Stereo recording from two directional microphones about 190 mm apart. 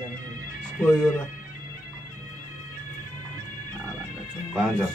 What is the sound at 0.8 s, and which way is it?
Speech, 10° left (ahead or behind).